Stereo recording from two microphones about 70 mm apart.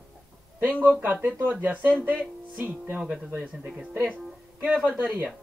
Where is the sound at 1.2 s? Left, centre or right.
Right.